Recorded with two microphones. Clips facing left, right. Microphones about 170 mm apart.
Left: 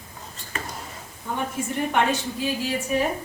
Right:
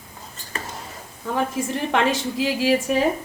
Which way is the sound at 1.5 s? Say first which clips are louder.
Right 1 dB; 90° right.